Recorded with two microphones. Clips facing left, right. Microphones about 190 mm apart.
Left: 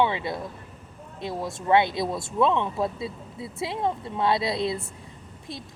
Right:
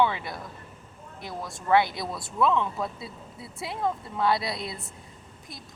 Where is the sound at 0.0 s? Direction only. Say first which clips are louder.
Left 1 dB; 20° left (ahead or behind).